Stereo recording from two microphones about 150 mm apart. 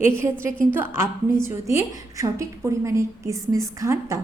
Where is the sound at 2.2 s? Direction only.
20° right (ahead or behind).